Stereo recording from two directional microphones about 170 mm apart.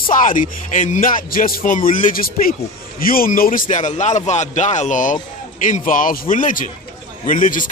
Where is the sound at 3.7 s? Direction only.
45° left (ahead or behind).